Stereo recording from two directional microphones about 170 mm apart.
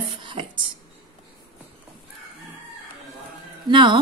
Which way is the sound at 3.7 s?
25° right (ahead or behind).